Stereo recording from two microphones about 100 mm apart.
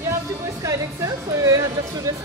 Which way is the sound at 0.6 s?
35° right (ahead or behind).